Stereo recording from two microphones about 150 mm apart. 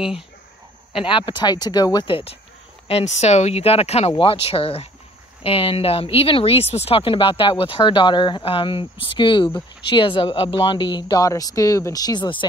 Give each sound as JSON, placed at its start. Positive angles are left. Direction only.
{"t": 0.9, "sound": "speech", "side_deg": 35}